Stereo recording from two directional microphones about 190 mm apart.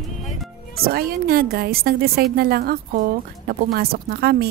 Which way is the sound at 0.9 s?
50° right (ahead or behind).